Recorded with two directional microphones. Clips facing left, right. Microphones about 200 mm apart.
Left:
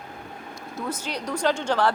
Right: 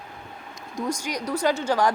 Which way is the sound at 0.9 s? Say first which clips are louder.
Right 2 dB; 10° right (ahead or behind).